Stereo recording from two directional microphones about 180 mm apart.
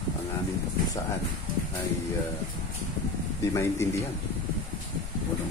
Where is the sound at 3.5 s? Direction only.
15° left (ahead or behind).